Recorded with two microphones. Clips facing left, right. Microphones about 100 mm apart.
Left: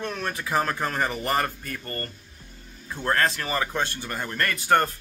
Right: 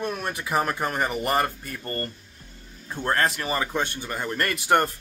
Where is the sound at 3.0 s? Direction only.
25° right (ahead or behind).